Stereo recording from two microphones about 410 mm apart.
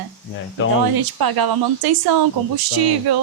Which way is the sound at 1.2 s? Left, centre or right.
Right.